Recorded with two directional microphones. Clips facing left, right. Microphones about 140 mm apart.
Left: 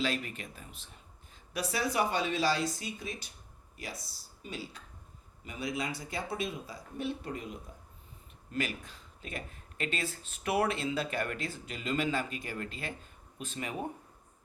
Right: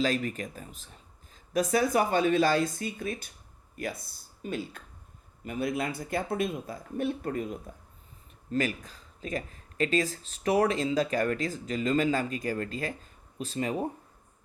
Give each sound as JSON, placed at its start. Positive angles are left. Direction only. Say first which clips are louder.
{"t": 0.0, "sound": "speech", "louder": "right 6 dB", "side_deg": -40}